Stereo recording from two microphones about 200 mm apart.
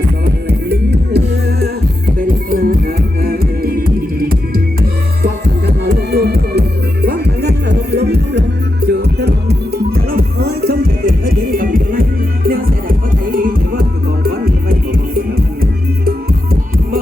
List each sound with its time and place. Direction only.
0.3 s music: 55° right (ahead or behind)